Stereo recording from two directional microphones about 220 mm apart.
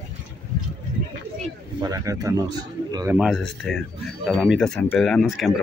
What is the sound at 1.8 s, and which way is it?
Speech, 15° right (ahead or behind).